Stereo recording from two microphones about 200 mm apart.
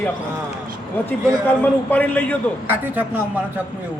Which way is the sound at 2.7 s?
10° right (ahead or behind).